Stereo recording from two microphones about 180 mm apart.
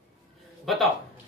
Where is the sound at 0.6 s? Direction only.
Centre (ahead or behind).